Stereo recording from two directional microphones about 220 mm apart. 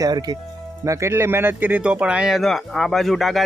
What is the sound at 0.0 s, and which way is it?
A man's voice, 15° right (ahead or behind).